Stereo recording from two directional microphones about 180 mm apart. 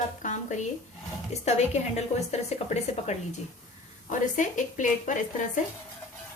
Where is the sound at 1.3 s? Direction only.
40° left (ahead or behind).